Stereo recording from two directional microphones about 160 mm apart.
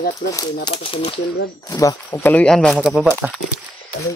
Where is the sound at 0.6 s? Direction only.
35° left (ahead or behind).